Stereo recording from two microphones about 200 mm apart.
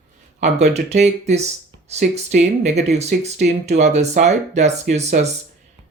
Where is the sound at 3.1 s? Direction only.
50° right (ahead or behind).